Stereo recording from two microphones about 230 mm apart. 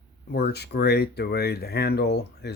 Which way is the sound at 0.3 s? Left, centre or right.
Left.